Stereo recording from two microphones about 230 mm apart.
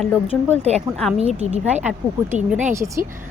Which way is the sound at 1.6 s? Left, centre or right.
Centre.